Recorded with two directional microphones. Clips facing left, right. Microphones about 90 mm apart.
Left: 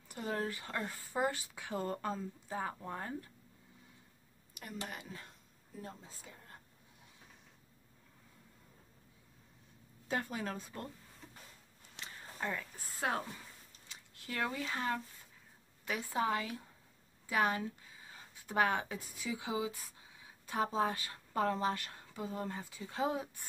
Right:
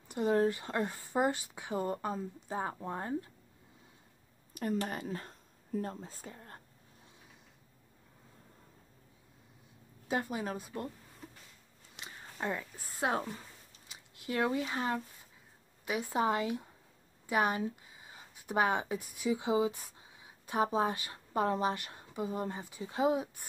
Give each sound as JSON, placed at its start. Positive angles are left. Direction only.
{"t": 0.1, "sound": "speech", "side_deg": -25}
{"t": 4.6, "sound": "speech", "side_deg": -45}
{"t": 10.0, "sound": "speech", "side_deg": -15}
{"t": 12.0, "sound": "a sound", "side_deg": -20}
{"t": 13.0, "sound": "speech", "side_deg": -25}
{"t": 17.3, "sound": "a sound", "side_deg": -20}
{"t": 19.1, "sound": "speech", "side_deg": -20}